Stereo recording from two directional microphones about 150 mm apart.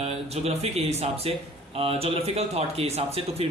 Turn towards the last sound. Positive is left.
turn(degrees=-40)  # may be behind; listen again after turning